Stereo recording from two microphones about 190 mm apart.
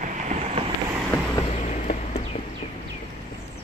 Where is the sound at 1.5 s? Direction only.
35° left (ahead or behind).